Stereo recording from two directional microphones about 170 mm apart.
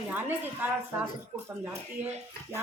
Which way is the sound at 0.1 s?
10° right (ahead or behind).